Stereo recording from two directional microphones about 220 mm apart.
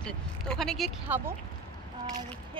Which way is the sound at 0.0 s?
5° left (ahead or behind).